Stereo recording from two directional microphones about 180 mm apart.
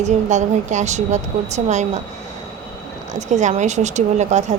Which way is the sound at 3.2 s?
40° right (ahead or behind).